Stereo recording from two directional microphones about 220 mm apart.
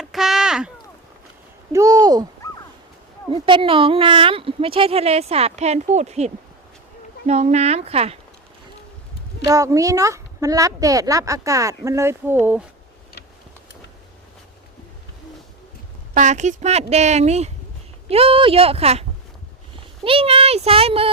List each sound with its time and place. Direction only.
0.0 s a sound: centre (ahead or behind)
1.7 s speech: 15° right (ahead or behind)
3.3 s speech: 25° right (ahead or behind)
9.5 s speech: 15° right (ahead or behind)
16.1 s speech: 35° right (ahead or behind)
20.1 s speech: 25° right (ahead or behind)